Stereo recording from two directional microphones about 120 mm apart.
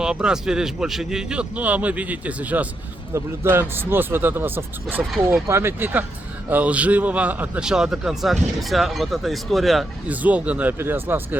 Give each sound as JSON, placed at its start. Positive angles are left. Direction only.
{"t": 0.0, "sound": "a man's voice", "side_deg": -5}
{"t": 10.1, "sound": "speech", "side_deg": -10}